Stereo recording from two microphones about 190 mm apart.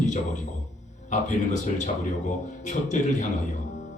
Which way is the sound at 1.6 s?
40° left (ahead or behind).